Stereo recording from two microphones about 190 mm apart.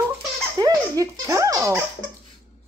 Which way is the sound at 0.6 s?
20° right (ahead or behind).